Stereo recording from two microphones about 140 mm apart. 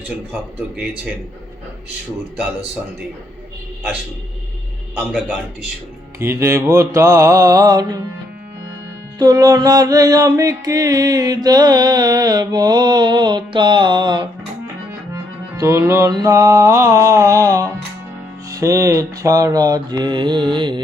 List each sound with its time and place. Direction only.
6.1 s music: 20° right (ahead or behind)
9.1 s music: 30° right (ahead or behind)
15.1 s music: 20° right (ahead or behind)
20.5 s carnatic music: 35° right (ahead or behind)